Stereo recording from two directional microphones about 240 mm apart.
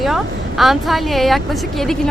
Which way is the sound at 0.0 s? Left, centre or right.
Centre.